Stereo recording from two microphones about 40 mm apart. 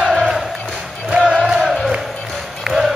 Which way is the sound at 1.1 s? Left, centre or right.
Right.